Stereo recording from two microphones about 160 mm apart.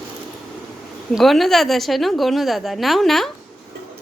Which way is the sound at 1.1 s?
Centre (ahead or behind).